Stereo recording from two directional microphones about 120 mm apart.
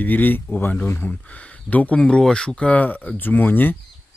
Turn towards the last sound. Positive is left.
turn(degrees=15)  # may be behind; listen again after turning